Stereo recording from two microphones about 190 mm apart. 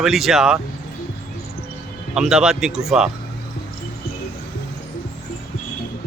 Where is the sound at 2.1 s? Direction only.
5° right (ahead or behind).